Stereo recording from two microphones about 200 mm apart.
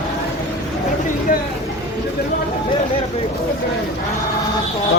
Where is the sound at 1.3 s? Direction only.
45° left (ahead or behind).